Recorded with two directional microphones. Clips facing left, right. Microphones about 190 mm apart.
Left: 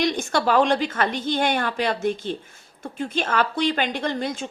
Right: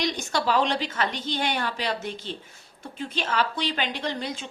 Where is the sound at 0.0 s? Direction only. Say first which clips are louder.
Left 5 dB; 55° left (ahead or behind).